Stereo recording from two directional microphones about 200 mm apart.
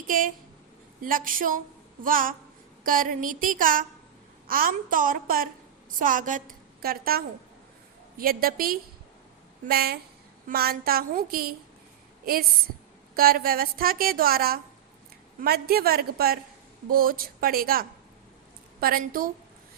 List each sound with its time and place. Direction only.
1.0 s a woman's voice: 45° right (ahead or behind)